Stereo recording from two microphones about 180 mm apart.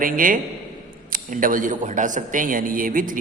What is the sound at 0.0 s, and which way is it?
A man's voice, 50° right (ahead or behind).